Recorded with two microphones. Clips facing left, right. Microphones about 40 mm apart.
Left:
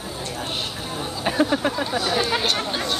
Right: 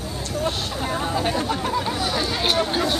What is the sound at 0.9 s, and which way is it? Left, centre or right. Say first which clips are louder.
Chatter: right 8 dB; right.